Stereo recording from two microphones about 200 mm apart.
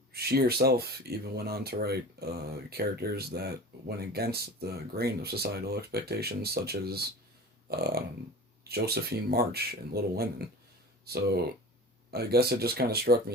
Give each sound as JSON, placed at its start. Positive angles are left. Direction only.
{"t": 0.1, "sound": "speech", "side_deg": -50}